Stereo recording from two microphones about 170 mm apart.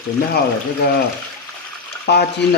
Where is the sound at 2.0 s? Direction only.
70° left (ahead or behind).